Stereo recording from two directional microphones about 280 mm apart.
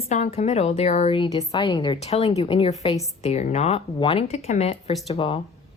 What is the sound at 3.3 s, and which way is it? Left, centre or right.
Speech, left.